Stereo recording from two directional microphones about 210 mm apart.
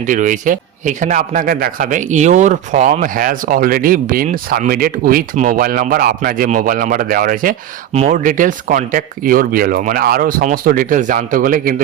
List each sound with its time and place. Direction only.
0.0 s a man's voice: 35° right (ahead or behind)